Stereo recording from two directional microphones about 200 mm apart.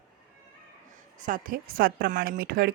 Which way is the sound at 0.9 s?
40° right (ahead or behind).